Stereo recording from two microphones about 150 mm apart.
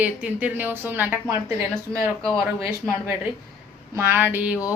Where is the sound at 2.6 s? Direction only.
15° right (ahead or behind).